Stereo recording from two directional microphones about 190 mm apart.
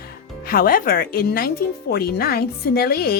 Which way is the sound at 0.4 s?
50° left (ahead or behind).